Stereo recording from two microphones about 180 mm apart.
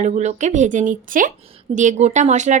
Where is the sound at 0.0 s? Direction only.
40° right (ahead or behind).